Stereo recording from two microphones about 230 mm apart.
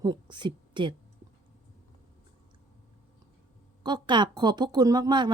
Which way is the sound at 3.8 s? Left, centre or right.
Centre.